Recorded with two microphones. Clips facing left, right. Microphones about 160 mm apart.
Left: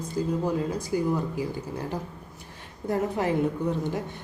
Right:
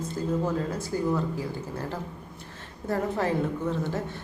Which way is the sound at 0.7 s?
15° left (ahead or behind).